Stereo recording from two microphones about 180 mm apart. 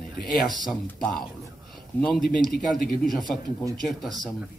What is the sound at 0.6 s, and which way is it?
Speech, centre (ahead or behind).